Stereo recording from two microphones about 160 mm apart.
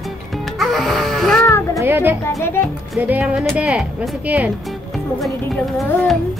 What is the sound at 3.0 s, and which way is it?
Speech, 10° right (ahead or behind).